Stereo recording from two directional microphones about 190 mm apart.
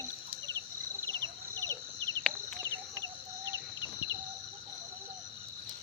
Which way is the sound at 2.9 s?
15° right (ahead or behind).